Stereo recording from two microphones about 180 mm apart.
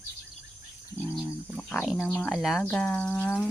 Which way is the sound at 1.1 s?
5° left (ahead or behind).